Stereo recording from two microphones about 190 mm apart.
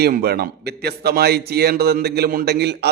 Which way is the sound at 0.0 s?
55° right (ahead or behind).